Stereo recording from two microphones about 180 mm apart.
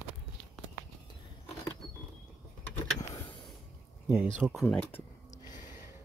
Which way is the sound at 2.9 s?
20° left (ahead or behind).